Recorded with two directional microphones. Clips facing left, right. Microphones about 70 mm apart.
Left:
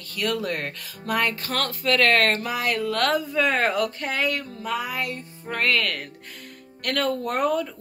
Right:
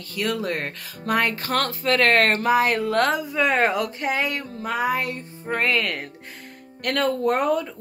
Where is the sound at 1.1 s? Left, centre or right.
Right.